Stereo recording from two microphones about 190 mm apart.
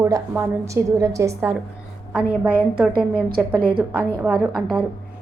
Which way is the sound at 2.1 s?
5° right (ahead or behind).